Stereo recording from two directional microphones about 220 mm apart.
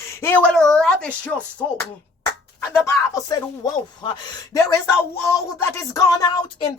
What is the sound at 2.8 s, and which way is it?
Speech, 15° left (ahead or behind).